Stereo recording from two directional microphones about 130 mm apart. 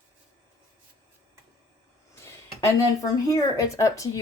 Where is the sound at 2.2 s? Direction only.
25° left (ahead or behind).